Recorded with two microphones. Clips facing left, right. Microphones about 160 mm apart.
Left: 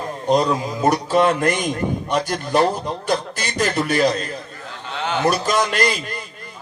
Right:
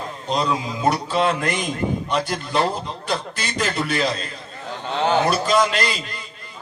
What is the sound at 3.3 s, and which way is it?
Speech, 45° left (ahead or behind).